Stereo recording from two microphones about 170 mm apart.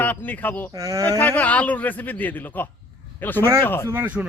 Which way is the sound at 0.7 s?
20° right (ahead or behind).